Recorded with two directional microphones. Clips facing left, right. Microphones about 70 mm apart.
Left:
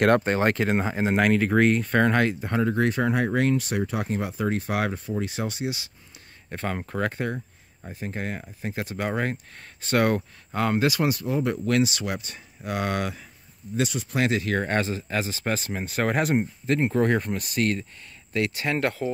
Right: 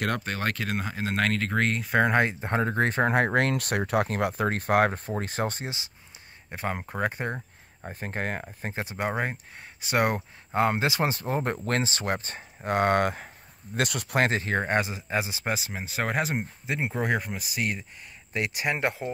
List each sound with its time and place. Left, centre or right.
0.2 s speech: left; by 1.9 s centre
1.9 s speech: centre; by 3.2 s right
3.2 s speech: right
6.5 s speech: centre
7.2 s a sound: right
7.9 s speech: right
8.8 s speech: right
14.2 s speech: right
14.6 s speech: centre